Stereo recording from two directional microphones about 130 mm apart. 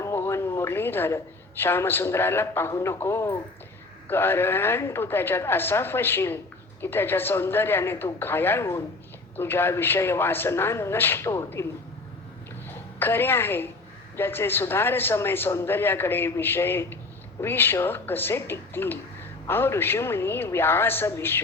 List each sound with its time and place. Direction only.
0.0 s a woman's voice: 20° left (ahead or behind)
12.6 s a woman's voice: 15° left (ahead or behind)